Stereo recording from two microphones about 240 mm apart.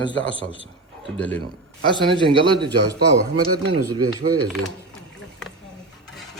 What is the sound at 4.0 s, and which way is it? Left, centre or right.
Speech, right.